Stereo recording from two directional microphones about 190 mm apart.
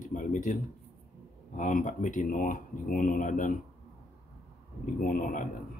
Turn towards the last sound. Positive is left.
turn(degrees=45)  # may be behind; listen again after turning